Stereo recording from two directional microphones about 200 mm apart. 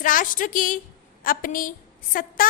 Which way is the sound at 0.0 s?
45° left (ahead or behind).